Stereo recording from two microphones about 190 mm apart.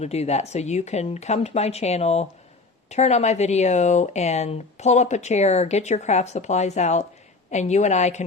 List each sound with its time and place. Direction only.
0.0 s speech: 35° left (ahead or behind)